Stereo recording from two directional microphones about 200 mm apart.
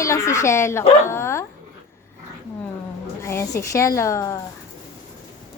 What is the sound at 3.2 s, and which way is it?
Speech, 15° left (ahead or behind).